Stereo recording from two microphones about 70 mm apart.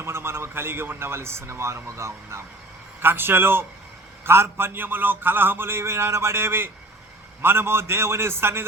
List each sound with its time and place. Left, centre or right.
0.0 s a man's voice: right
3.0 s a man's voice: right